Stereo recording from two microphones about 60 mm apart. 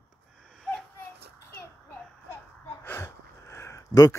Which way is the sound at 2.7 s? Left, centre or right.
Left.